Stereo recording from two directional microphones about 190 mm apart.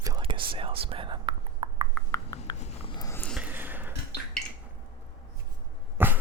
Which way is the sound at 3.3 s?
10° right (ahead or behind).